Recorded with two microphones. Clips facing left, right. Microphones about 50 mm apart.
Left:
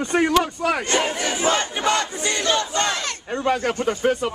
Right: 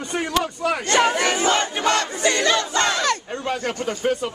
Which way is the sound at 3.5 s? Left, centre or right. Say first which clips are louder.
Left 4 dB; centre.